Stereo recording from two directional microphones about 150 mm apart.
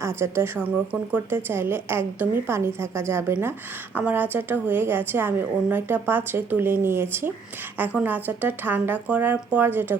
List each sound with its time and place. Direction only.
0.0 s a woman's voice: 20° right (ahead or behind)